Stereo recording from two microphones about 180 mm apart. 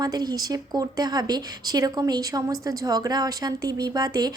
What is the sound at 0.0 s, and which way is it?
Speech, 20° right (ahead or behind).